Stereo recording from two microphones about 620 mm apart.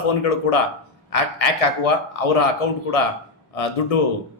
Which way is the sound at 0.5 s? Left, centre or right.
Left.